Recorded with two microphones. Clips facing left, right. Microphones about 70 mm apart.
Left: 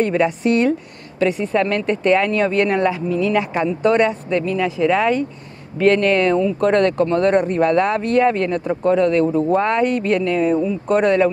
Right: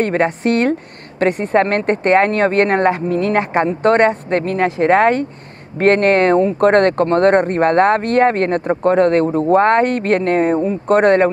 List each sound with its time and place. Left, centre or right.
0.0 s speech: right